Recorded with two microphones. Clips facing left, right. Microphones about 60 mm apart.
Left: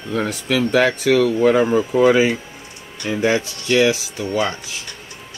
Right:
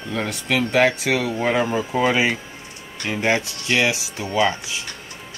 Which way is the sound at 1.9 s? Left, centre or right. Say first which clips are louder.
Left 5 dB; right.